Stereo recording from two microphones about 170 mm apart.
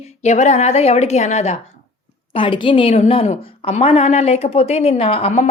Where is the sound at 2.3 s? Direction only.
30° left (ahead or behind).